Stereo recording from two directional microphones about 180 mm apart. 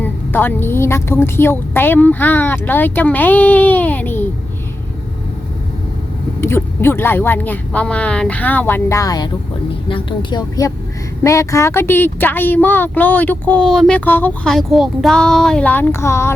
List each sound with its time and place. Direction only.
0.0 s speech: 10° left (ahead or behind)
6.4 s a woman's voice: 10° left (ahead or behind)